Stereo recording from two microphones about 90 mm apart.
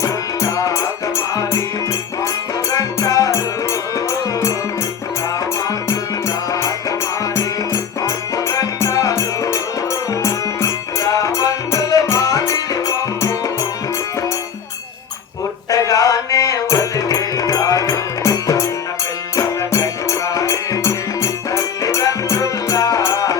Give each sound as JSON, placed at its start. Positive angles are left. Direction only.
{"t": 0.0, "sound": "music", "side_deg": 35}
{"t": 5.6, "sound": "music", "side_deg": 40}
{"t": 15.7, "sound": "music", "side_deg": 40}